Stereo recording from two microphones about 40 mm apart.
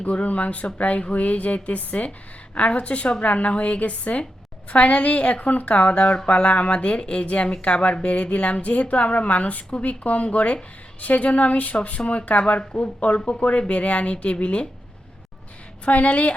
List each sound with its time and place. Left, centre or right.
0.0 s a woman's voice: left
15.8 s a woman's voice: left